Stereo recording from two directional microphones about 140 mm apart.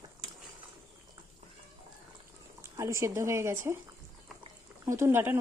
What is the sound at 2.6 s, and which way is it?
Speech, 20° right (ahead or behind).